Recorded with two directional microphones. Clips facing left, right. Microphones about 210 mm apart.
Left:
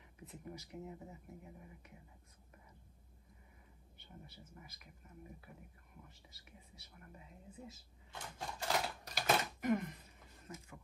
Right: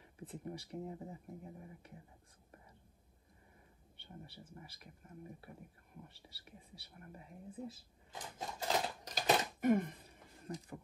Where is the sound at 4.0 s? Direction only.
30° right (ahead or behind).